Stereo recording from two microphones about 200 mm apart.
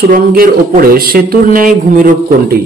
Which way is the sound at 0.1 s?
45° right (ahead or behind).